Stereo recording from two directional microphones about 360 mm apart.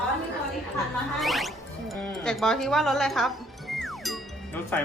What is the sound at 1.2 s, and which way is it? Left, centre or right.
Music, centre.